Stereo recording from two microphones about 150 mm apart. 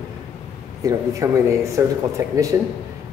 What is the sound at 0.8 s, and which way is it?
A woman's voice, 20° right (ahead or behind).